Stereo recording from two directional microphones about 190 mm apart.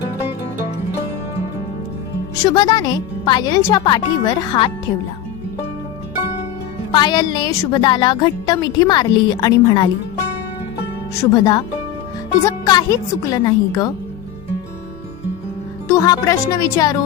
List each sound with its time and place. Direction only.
2.4 s a woman's voice: 25° left (ahead or behind)
6.9 s a woman's voice: 25° left (ahead or behind)
11.1 s a woman's voice: 20° left (ahead or behind)
15.9 s speech: 15° left (ahead or behind)